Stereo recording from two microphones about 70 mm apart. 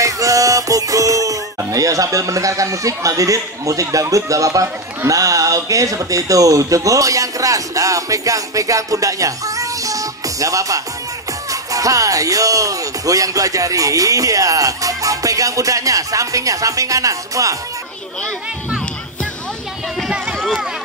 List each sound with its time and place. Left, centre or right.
0.0 s music: right
1.7 s a man's voice: right
20.3 s a sound: centre